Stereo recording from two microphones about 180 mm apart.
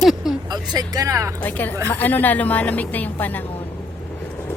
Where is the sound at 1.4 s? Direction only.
10° left (ahead or behind).